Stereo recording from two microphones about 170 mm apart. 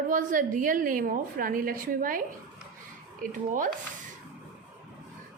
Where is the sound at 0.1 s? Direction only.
50° right (ahead or behind).